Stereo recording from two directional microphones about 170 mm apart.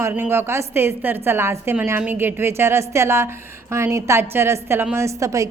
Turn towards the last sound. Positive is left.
turn(degrees=-20)  # may be behind; listen again after turning